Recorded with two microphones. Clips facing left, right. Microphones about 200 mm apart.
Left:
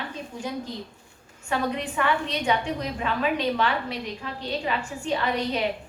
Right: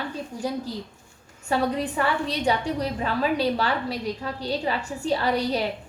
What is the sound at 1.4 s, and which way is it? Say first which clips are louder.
A woman's voice: right 3 dB; 35° right (ahead or behind).